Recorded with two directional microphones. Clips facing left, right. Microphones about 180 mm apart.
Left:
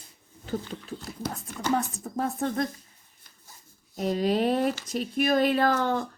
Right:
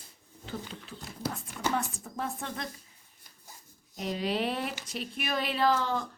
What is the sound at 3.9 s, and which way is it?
Speech, 45° left (ahead or behind).